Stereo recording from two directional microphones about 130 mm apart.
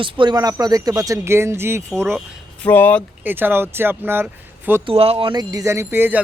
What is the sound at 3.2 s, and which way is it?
Speech, 15° right (ahead or behind).